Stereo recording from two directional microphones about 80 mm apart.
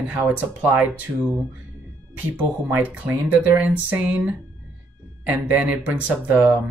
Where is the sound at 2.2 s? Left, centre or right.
Right.